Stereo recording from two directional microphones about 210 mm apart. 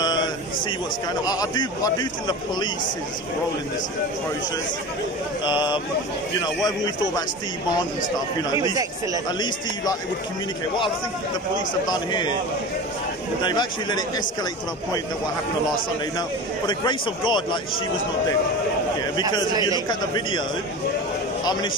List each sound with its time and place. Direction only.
0.0 s a sound: 20° left (ahead or behind)
1.2 s a man's voice: 15° left (ahead or behind)
5.4 s a man's voice: 20° left (ahead or behind)
8.5 s speech: 15° right (ahead or behind)
11.9 s a man's voice: 20° left (ahead or behind)
13.4 s a man's voice: 20° left (ahead or behind)
16.2 s a man's voice: 20° left (ahead or behind)
19.9 s a man's voice: 20° left (ahead or behind)